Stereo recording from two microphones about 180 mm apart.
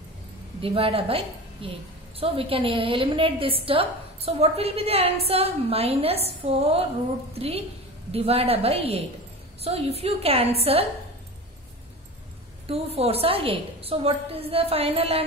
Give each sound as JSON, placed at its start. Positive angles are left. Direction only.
{"t": 0.6, "sound": "a woman's voice", "side_deg": -30}
{"t": 12.6, "sound": "a woman's voice", "side_deg": -35}